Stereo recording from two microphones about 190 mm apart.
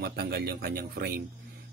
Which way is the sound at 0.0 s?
55° right (ahead or behind).